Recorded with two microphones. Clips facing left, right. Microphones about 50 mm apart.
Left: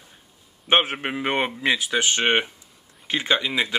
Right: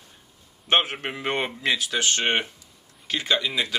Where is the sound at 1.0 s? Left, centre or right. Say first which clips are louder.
Left 3 dB; centre.